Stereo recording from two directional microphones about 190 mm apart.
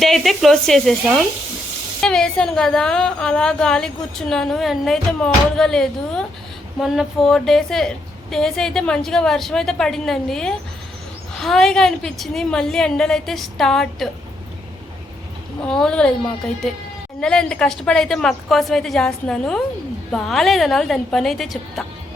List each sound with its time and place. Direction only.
0.0 s a woman's voice: centre (ahead or behind)
15.6 s a woman's voice: 5° left (ahead or behind)
17.2 s a woman's voice: 5° left (ahead or behind)